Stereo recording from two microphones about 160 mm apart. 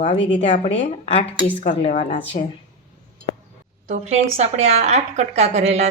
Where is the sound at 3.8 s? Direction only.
45° right (ahead or behind).